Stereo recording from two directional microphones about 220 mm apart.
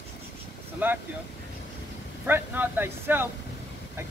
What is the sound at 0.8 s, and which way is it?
Speech, 10° right (ahead or behind).